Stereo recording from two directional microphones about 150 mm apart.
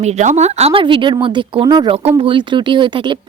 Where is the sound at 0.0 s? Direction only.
50° right (ahead or behind).